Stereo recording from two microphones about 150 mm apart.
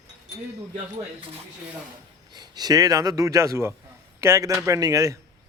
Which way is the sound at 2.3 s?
25° right (ahead or behind).